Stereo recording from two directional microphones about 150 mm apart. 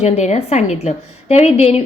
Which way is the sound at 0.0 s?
45° left (ahead or behind).